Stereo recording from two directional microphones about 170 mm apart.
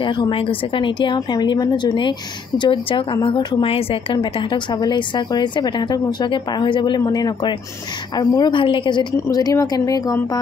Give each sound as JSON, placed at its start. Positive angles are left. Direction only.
{"t": 0.0, "sound": "speech", "side_deg": 25}